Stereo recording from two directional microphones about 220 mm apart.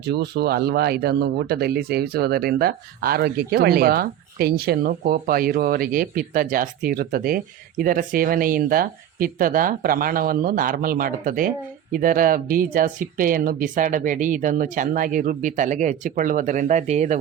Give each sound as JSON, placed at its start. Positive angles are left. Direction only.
{"t": 0.0, "sound": "speech", "side_deg": -50}